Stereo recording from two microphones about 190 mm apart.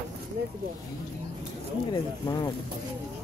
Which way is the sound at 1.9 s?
20° left (ahead or behind).